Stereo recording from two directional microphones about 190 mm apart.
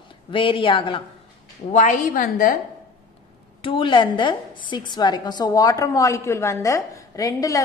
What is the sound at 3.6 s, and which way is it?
A woman's voice, 25° left (ahead or behind).